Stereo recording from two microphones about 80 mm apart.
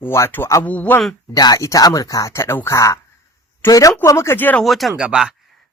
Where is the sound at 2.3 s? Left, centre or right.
Left.